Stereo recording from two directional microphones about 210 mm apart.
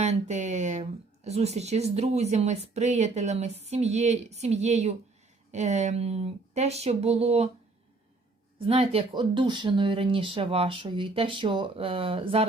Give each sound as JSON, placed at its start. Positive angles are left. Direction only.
{"t": 0.0, "sound": "speech", "side_deg": -35}
{"t": 8.5, "sound": "speech", "side_deg": -25}